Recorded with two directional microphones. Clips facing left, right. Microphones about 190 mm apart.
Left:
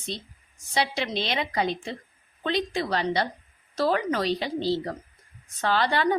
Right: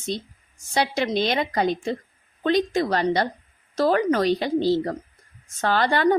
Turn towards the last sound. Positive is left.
turn(degrees=-50)  # may be behind; listen again after turning